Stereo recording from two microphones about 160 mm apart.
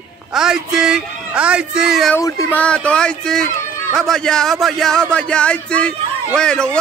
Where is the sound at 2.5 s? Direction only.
10° left (ahead or behind).